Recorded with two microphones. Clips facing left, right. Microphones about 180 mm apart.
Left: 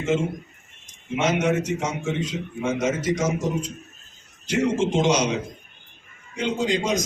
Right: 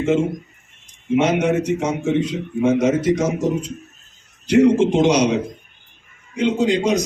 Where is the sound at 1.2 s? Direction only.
60° right (ahead or behind).